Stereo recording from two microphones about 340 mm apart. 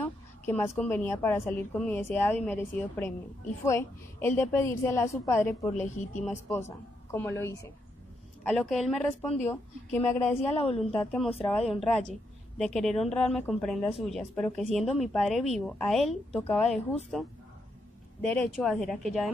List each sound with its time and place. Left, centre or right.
0.0 s a woman's voice: centre
5.7 s speech: left
6.2 s a woman's voice: centre
10.6 s a woman's voice: centre
11.0 s speech: centre